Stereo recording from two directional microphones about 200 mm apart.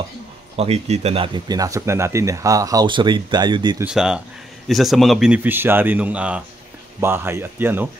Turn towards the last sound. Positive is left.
turn(degrees=-10)  # may be behind; listen again after turning